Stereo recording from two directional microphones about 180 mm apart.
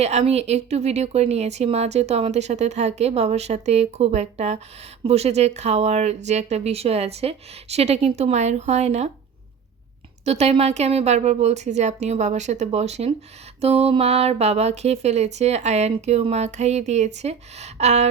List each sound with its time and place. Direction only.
0.0 s speech: 35° right (ahead or behind)
10.2 s speech: 35° right (ahead or behind)